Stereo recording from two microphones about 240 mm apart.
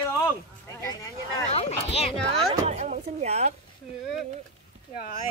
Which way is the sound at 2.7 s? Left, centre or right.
Right.